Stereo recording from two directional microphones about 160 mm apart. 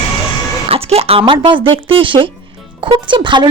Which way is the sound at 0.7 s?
40° right (ahead or behind).